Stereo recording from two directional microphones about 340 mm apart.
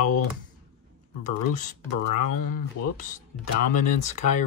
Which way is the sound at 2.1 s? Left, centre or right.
Left.